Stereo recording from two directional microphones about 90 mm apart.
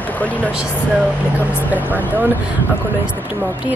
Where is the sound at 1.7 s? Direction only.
20° right (ahead or behind).